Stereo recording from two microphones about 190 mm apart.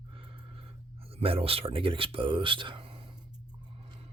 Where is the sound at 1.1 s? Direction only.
30° right (ahead or behind).